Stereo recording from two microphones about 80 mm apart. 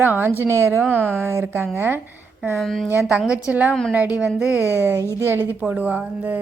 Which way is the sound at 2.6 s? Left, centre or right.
Centre.